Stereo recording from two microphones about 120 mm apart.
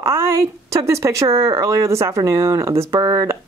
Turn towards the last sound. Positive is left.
turn(degrees=-25)  # may be behind; listen again after turning